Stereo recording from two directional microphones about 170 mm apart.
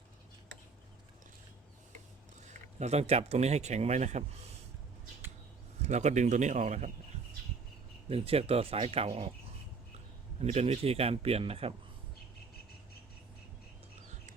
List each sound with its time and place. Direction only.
2.7 s speech: 40° right (ahead or behind)
5.8 s a man's voice: 40° right (ahead or behind)
8.1 s speech: 35° right (ahead or behind)
10.4 s speech: 35° right (ahead or behind)